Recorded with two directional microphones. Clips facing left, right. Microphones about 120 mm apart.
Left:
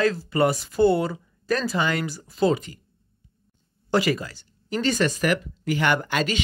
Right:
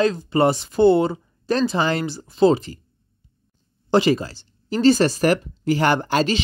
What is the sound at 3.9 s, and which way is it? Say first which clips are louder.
Speech: right 5 dB; 25° right (ahead or behind).